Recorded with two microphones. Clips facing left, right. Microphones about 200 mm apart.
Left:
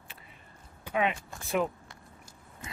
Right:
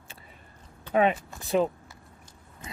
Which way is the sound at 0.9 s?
40° right (ahead or behind).